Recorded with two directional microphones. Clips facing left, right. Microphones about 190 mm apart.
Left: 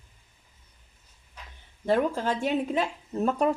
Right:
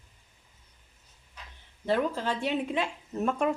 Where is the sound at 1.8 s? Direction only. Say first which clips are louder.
Left 3 dB; 45° left (ahead or behind).